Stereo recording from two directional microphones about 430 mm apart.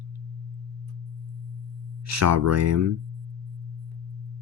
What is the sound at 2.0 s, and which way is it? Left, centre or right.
Speech, right.